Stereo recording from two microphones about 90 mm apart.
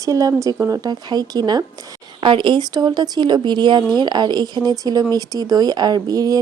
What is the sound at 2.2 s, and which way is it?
Speech, 65° right (ahead or behind).